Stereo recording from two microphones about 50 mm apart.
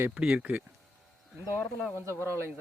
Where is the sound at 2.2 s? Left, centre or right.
Right.